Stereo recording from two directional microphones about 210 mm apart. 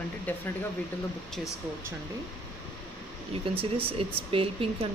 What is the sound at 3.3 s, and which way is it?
Speech, 25° right (ahead or behind).